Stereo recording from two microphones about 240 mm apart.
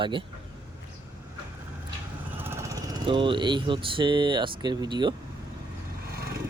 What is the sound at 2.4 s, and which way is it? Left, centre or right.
Speech, centre.